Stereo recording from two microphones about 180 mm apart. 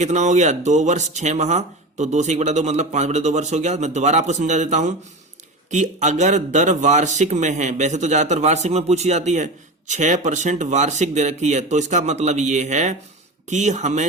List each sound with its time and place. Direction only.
0.0 s speech: 40° right (ahead or behind)